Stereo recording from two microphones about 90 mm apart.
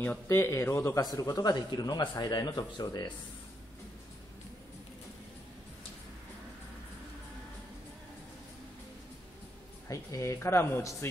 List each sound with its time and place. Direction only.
0.3 s speech: 30° left (ahead or behind)
1.0 s speech: 40° left (ahead or behind)
9.8 s speech: 35° left (ahead or behind)